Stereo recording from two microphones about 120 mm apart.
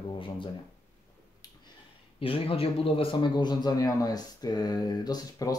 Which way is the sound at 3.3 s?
35° left (ahead or behind).